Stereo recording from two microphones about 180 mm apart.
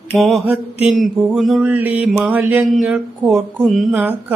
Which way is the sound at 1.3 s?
Centre (ahead or behind).